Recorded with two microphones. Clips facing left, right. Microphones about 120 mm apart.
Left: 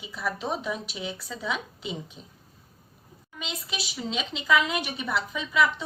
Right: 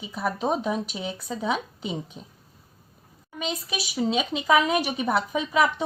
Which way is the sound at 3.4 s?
45° right (ahead or behind).